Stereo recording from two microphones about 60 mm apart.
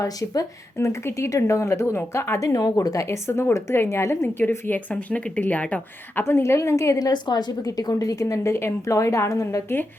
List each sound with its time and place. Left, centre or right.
0.0 s a woman's voice: left
0.9 s speech: left
2.4 s a woman's voice: left
4.1 s a woman's voice: left
4.9 s a woman's voice: left
6.2 s speech: left
6.6 s a woman's voice: left
8.5 s a woman's voice: left